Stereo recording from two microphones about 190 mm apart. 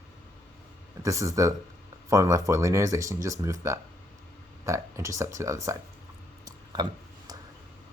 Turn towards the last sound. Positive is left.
turn(degrees=-20)  # may be behind; listen again after turning